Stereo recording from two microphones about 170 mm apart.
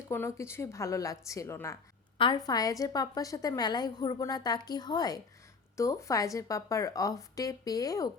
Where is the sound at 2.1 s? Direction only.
25° left (ahead or behind).